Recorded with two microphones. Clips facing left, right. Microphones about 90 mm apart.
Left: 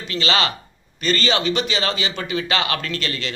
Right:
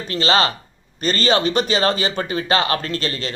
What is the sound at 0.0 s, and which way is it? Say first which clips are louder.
A man's voice: right 3 dB; 40° right (ahead or behind).